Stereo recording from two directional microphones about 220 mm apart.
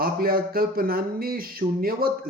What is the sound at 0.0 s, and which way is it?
Speech, 40° right (ahead or behind).